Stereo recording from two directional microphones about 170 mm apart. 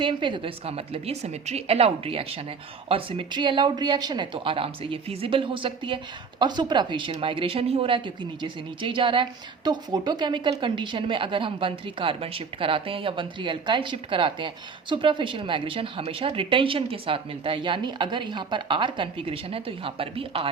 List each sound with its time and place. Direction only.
0.0 s speech: 30° right (ahead or behind)